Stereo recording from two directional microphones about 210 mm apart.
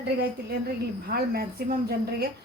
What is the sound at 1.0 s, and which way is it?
A woman's voice, 45° right (ahead or behind).